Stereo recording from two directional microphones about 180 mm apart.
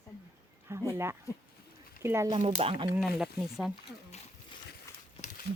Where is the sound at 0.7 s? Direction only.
15° right (ahead or behind).